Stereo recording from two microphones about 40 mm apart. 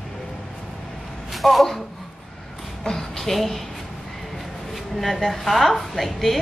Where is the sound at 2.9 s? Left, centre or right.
Centre.